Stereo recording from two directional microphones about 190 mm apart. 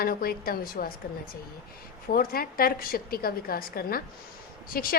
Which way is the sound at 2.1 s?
50° left (ahead or behind).